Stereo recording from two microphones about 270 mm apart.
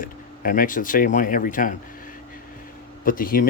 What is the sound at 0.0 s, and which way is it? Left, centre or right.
Speech, left.